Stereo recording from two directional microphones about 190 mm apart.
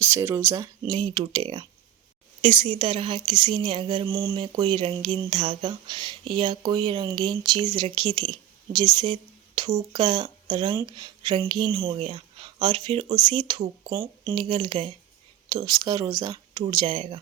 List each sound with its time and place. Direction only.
0.0 s speech: 10° right (ahead or behind)
0.9 s a woman's voice: 35° right (ahead or behind)